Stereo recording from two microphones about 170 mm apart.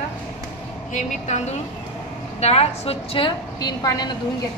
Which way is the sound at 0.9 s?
45° left (ahead or behind).